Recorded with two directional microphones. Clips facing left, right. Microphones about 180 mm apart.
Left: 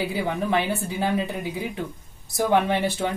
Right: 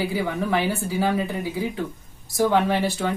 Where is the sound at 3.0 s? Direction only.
20° left (ahead or behind).